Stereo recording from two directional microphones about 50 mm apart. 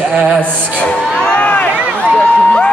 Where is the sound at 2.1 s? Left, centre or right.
Left.